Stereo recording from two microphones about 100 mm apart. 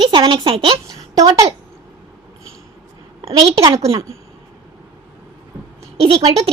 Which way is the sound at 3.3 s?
75° right (ahead or behind).